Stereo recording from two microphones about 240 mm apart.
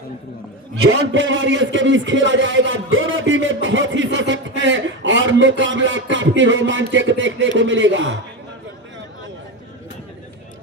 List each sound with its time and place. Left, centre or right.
0.9 s a man's voice: right